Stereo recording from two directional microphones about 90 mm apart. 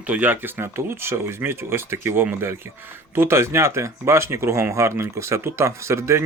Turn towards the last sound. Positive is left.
turn(degrees=-30)  # may be behind; listen again after turning